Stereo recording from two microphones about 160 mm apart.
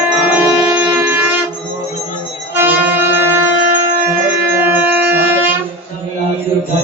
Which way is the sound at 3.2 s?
15° right (ahead or behind).